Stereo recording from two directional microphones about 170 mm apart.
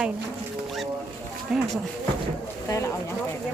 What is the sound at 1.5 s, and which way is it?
Speech, 5° right (ahead or behind).